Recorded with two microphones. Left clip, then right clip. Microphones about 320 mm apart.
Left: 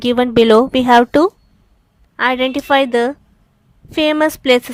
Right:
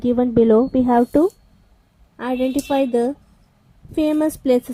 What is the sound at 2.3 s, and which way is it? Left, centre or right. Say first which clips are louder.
Speech: left 3 dB; left.